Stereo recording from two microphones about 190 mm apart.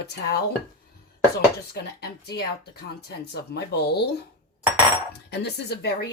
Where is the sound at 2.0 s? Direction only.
60° left (ahead or behind).